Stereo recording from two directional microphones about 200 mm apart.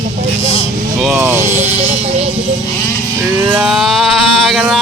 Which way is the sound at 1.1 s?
15° right (ahead or behind).